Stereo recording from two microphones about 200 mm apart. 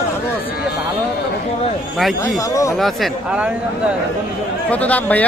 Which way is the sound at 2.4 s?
15° left (ahead or behind).